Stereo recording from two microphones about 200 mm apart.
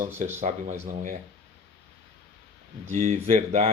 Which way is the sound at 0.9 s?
40° right (ahead or behind).